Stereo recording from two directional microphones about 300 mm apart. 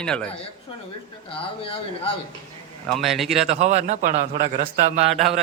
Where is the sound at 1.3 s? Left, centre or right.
Centre.